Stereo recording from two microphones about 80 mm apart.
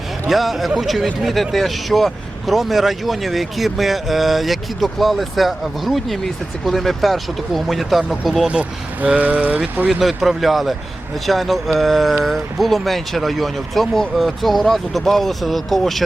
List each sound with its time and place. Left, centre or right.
0.3 s speech: centre
8.4 s speech: centre
9.9 s speech: centre